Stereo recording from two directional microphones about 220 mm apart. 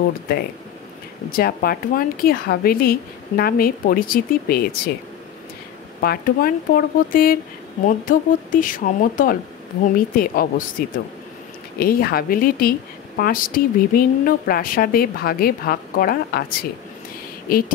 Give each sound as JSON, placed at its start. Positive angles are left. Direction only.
{"t": 1.3, "sound": "a woman's voice", "side_deg": 45}
{"t": 5.9, "sound": "a woman's voice", "side_deg": 40}
{"t": 17.5, "sound": "a woman's voice", "side_deg": 45}